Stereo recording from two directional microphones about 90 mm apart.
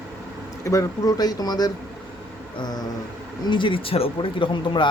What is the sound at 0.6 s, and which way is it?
Speech, 40° left (ahead or behind).